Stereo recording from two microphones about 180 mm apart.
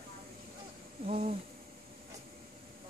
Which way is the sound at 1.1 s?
35° right (ahead or behind).